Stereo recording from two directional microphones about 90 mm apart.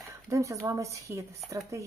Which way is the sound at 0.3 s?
35° right (ahead or behind).